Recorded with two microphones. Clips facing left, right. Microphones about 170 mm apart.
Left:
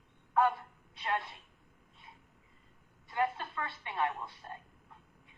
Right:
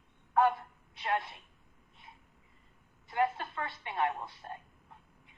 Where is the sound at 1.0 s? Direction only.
20° right (ahead or behind).